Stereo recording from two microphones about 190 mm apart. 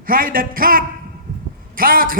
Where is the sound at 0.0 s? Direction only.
50° right (ahead or behind).